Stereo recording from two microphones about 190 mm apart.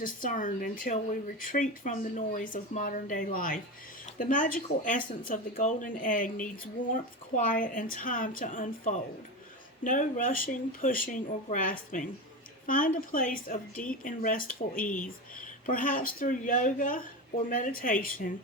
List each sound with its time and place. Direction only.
0.0 s speech: 45° left (ahead or behind)
15.6 s speech: 45° left (ahead or behind)